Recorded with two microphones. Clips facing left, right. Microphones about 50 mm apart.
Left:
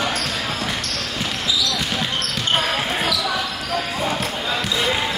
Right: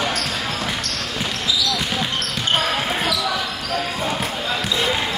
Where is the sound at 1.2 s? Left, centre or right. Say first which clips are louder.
Even; centre.